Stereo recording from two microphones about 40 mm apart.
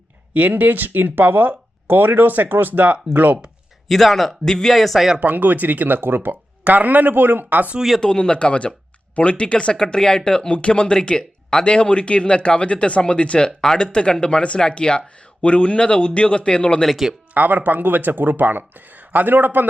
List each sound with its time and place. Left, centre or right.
0.3 s speech: right
3.8 s speech: centre
4.4 s speech: centre
4.7 s speech: centre
5.2 s speech: right
6.7 s speech: right
7.8 s speech: centre
8.0 s speech: left
13.4 s speech: centre
17.3 s speech: right